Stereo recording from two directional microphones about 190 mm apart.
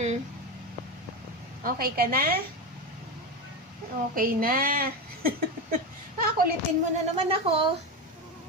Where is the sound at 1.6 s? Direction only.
50° right (ahead or behind).